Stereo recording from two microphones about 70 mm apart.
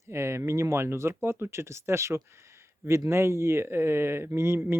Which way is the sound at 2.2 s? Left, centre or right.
Right.